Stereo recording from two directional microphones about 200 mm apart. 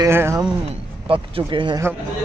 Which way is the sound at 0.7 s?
25° right (ahead or behind).